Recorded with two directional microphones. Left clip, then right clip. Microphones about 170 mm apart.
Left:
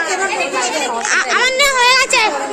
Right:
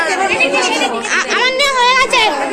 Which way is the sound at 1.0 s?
20° left (ahead or behind).